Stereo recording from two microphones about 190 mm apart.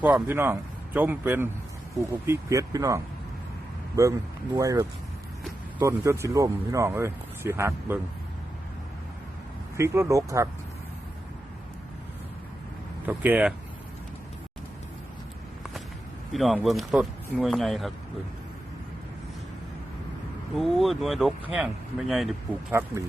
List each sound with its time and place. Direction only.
0.0 s speech: 10° right (ahead or behind)
9.7 s speech: 15° right (ahead or behind)
13.1 s speech: 10° right (ahead or behind)
16.3 s speech: centre (ahead or behind)
20.6 s speech: centre (ahead or behind)